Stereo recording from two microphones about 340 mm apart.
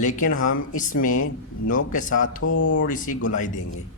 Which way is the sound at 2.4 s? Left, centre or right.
Left.